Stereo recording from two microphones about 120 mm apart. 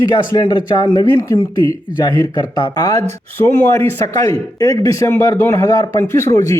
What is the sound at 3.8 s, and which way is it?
Speech, 25° left (ahead or behind).